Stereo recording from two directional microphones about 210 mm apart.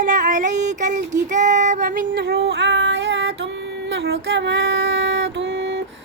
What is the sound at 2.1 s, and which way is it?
Child singing, 50° right (ahead or behind).